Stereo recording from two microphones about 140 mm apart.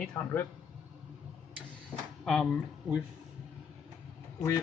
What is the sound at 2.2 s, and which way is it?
Speech, centre (ahead or behind).